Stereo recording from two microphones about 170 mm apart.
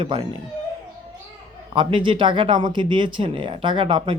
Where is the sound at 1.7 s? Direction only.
30° right (ahead or behind).